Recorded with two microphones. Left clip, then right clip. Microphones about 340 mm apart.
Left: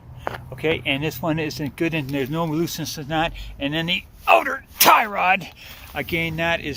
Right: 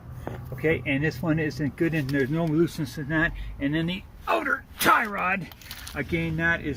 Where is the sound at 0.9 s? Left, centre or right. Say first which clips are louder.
Left 3 dB; left.